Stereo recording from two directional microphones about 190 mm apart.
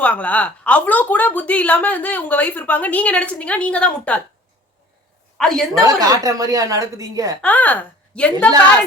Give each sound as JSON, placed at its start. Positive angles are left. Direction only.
{"t": 0.0, "sound": "a woman's voice", "side_deg": 10}
{"t": 5.4, "sound": "a woman's voice", "side_deg": 0}
{"t": 5.8, "sound": "a woman's voice", "side_deg": -20}
{"t": 7.4, "sound": "a woman's voice", "side_deg": 10}